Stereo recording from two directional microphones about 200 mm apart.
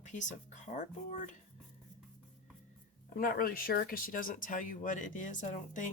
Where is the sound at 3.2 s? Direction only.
45° left (ahead or behind).